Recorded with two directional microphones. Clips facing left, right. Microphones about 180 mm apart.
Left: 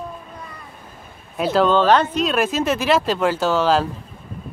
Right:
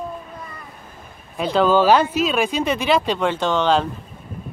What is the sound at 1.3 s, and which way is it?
Speech, 5° left (ahead or behind).